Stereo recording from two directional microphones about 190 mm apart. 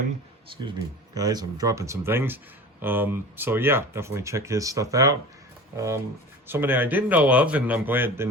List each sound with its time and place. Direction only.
0.5 s speech: 25° right (ahead or behind)